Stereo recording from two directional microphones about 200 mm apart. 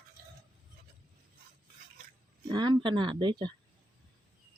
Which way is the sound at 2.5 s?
20° right (ahead or behind).